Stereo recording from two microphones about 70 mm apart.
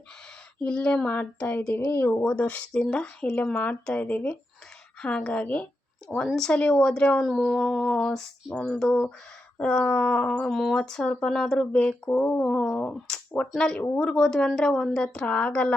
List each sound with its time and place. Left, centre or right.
0.6 s speech: centre
2.7 s speech: centre
6.2 s speech: centre
6.5 s speech: centre
12.4 s speech: centre